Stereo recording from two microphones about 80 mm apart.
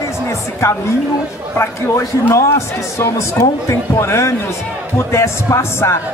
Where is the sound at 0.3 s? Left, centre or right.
Left.